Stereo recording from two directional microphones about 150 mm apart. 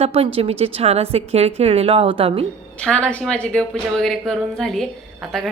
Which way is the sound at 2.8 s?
10° left (ahead or behind).